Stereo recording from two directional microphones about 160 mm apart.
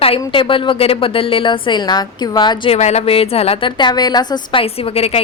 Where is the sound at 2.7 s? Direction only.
40° left (ahead or behind).